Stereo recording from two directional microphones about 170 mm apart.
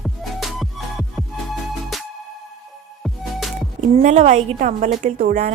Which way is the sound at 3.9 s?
40° right (ahead or behind).